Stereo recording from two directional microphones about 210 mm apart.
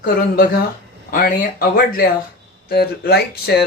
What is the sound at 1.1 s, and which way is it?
Speech, 45° left (ahead or behind).